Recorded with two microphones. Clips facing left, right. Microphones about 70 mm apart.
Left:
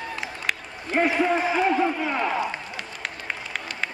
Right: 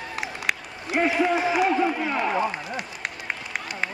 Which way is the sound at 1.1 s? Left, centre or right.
Centre.